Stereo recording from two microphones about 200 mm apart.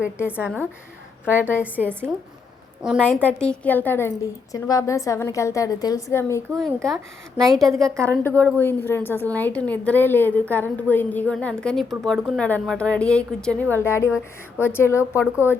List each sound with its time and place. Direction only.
0.2 s a woman's voice: 10° left (ahead or behind)
1.6 s a woman's voice: 10° right (ahead or behind); by 6.4 s 15° left (ahead or behind)
6.6 s speech: centre (ahead or behind)
7.9 s a woman's voice: 15° right (ahead or behind)
8.2 s a woman's voice: 10° left (ahead or behind)